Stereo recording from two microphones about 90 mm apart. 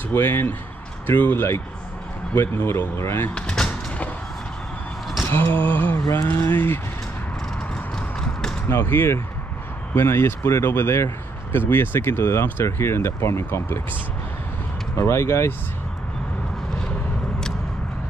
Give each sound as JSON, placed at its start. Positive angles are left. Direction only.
{"t": 0.1, "sound": "speech", "side_deg": 25}
{"t": 3.3, "sound": "vehicle", "side_deg": 10}
{"t": 5.3, "sound": "a sound", "side_deg": 25}
{"t": 5.9, "sound": "speech", "side_deg": 35}
{"t": 6.2, "sound": "speech", "side_deg": 20}
{"t": 7.9, "sound": "clip-clop", "side_deg": 5}
{"t": 8.8, "sound": "speech", "side_deg": 25}
{"t": 15.0, "sound": "speech", "side_deg": 30}